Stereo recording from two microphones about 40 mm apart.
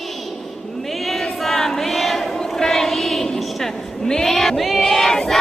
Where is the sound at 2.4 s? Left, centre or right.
Centre.